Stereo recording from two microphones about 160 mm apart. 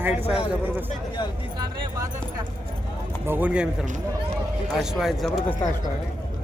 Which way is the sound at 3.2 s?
10° right (ahead or behind).